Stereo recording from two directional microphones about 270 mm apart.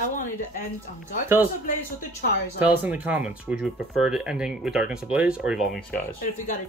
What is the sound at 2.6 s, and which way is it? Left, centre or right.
Speech, centre.